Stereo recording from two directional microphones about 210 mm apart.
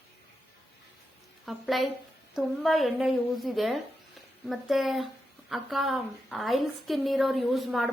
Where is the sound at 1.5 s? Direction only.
Centre (ahead or behind).